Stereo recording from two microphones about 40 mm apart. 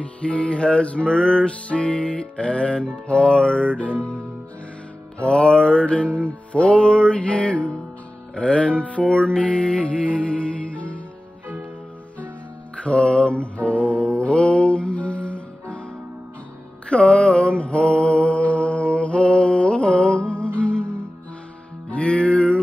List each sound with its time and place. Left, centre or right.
0.0 s music: left
9.1 s music: left
12.7 s music: left
16.9 s mantra: left
21.9 s music: left